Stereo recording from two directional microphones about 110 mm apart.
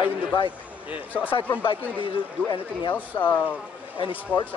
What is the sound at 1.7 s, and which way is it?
Speech, 50° left (ahead or behind).